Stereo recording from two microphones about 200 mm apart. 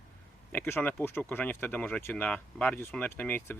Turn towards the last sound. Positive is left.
turn(degrees=10)  # may be behind; listen again after turning